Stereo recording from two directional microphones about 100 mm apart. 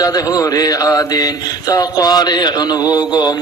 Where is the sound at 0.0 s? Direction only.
35° left (ahead or behind).